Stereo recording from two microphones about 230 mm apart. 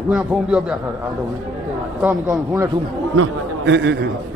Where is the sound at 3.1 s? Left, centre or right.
Right.